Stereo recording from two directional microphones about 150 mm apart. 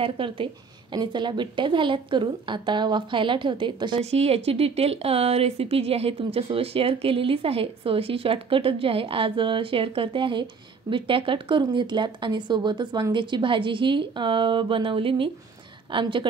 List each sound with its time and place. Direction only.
0.0 s speech: 35° right (ahead or behind)
4.0 s speech: 45° right (ahead or behind)